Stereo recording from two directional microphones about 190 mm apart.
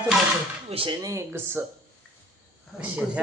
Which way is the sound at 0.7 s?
30° right (ahead or behind).